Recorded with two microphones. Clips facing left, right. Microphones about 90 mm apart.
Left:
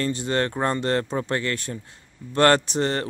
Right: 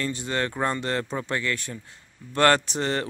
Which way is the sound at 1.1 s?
25° left (ahead or behind).